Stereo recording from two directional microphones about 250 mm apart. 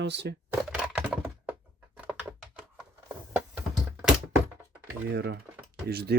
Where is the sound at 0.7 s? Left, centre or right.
Centre.